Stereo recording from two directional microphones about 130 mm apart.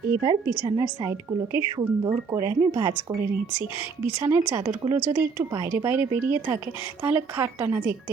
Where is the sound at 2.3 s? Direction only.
25° right (ahead or behind).